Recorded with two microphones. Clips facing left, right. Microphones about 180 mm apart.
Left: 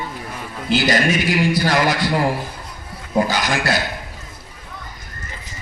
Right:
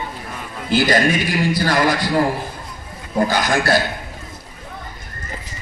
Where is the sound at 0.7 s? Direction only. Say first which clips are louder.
Right 1 dB; 50° right (ahead or behind).